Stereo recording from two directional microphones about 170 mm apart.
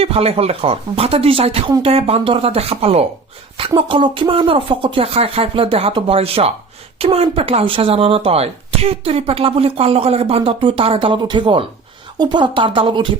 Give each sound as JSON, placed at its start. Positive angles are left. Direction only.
{"t": 0.0, "sound": "speech", "side_deg": -35}